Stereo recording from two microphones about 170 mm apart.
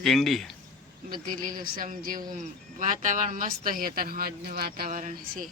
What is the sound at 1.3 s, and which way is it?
Speech, 55° right (ahead or behind).